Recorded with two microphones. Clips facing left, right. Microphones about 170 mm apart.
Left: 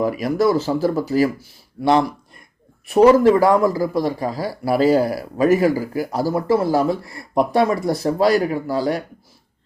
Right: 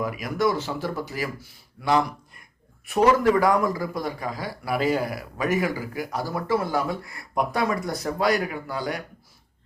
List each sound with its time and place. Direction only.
0.0 s speech: 35° left (ahead or behind)